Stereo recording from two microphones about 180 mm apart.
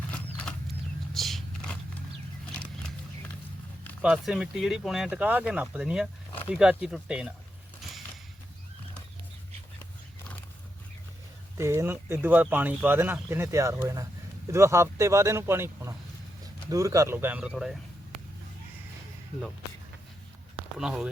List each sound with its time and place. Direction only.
1.1 s a sound: centre (ahead or behind)
4.0 s speech: 5° right (ahead or behind)
11.5 s speech: 15° right (ahead or behind)
20.7 s speech: 5° right (ahead or behind)